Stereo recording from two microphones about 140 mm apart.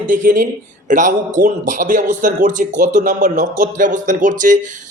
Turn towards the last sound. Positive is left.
turn(degrees=-65)  # may be behind; listen again after turning